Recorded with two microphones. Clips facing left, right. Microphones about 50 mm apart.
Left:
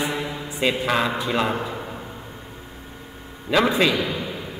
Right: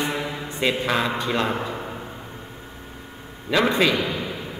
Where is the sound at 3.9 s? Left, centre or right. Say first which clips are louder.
Even; right.